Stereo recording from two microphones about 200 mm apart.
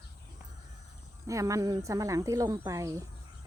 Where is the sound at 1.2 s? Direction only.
15° right (ahead or behind).